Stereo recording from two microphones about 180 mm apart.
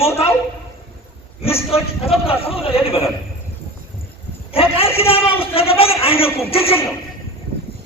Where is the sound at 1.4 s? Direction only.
35° left (ahead or behind).